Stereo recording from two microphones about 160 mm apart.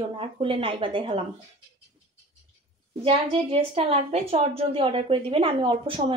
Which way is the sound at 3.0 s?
40° right (ahead or behind).